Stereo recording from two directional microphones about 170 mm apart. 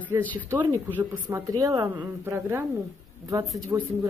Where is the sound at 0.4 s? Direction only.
10° right (ahead or behind).